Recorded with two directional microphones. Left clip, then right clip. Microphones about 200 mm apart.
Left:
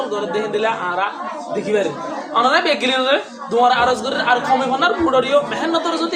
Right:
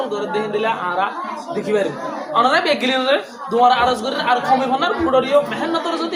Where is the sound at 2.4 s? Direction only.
10° left (ahead or behind).